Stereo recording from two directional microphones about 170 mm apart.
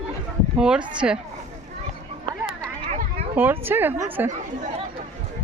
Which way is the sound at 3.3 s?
10° right (ahead or behind).